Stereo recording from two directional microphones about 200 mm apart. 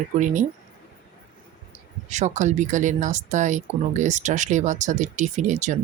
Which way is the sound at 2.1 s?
35° right (ahead or behind).